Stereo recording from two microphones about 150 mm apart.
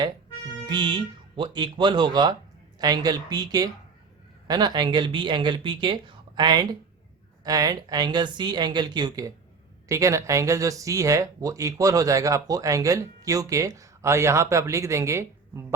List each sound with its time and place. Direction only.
0.7 s speech: 30° right (ahead or behind)